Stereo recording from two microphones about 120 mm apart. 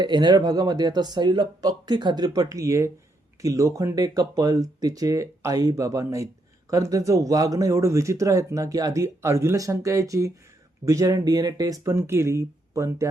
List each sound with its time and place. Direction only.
0.0 s speech: 40° right (ahead or behind)